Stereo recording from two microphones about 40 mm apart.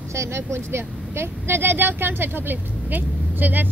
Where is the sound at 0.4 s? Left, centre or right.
Right.